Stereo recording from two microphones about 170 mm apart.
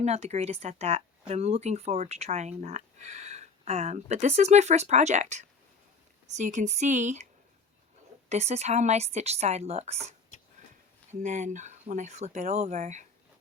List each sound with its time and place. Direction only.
0.0 s speech: 40° right (ahead or behind)
8.3 s speech: 40° right (ahead or behind)